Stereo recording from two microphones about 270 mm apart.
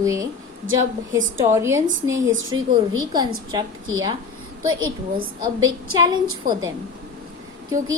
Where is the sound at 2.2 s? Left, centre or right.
Right.